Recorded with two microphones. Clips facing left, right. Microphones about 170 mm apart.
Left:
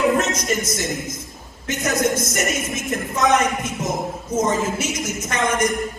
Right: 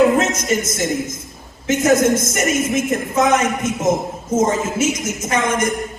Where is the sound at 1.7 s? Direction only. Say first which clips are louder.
Right 7 dB; 50° right (ahead or behind).